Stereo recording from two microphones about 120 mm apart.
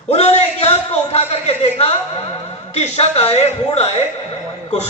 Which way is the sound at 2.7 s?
60° left (ahead or behind).